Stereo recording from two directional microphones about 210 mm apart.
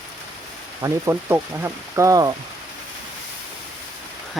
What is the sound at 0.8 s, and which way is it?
Speech, 15° right (ahead or behind).